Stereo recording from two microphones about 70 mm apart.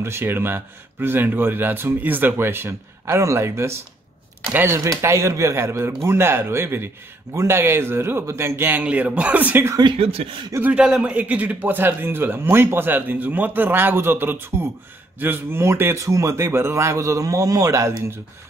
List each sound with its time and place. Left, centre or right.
0.0 s speech: right
8.8 s speech: centre
10.8 s a man's voice: centre
11.1 s speech: right